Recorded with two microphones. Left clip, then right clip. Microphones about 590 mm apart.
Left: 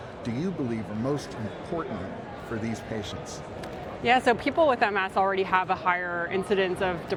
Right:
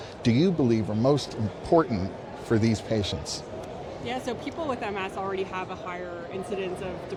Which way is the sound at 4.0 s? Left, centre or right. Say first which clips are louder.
Left 11 dB; left.